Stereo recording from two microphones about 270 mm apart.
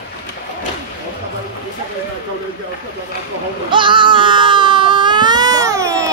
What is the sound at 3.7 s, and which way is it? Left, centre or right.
Baby cry, centre.